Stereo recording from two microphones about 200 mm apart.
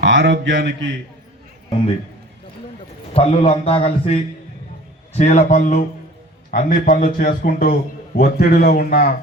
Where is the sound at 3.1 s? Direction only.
30° left (ahead or behind).